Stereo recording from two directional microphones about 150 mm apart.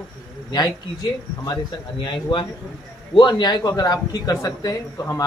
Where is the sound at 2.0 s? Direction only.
30° left (ahead or behind).